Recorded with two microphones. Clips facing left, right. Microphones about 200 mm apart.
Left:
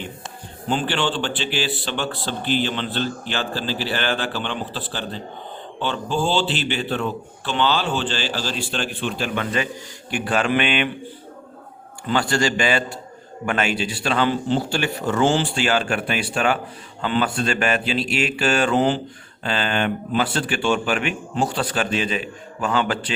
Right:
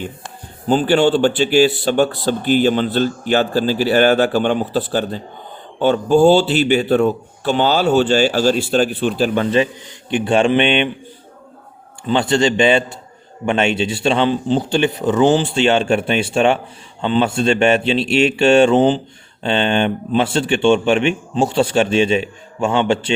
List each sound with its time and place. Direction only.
0.7 s a man's voice: 40° right (ahead or behind); by 10.8 s 25° right (ahead or behind)
12.0 s a man's voice: 20° right (ahead or behind)